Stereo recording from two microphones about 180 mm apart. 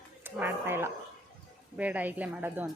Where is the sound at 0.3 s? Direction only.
10° right (ahead or behind).